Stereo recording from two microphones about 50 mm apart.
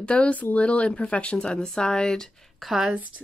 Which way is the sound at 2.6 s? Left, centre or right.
Centre.